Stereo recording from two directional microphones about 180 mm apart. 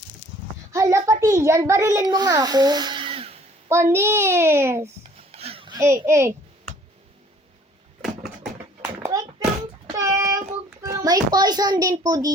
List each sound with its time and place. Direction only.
0.7 s a sound: 15° right (ahead or behind); by 3.4 s 30° right (ahead or behind)
3.7 s a child's voice: 15° right (ahead or behind)
5.1 s a sound: 35° right (ahead or behind); by 6.3 s 15° right (ahead or behind)
8.8 s children playing: 15° right (ahead or behind)
9.9 s child singing: 15° right (ahead or behind)
10.8 s a child's voice: 20° right (ahead or behind)